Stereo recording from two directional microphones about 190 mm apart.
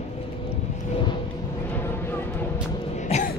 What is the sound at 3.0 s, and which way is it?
Music, 35° left (ahead or behind).